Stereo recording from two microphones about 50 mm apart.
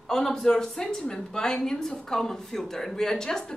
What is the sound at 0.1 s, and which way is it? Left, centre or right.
Speech, centre.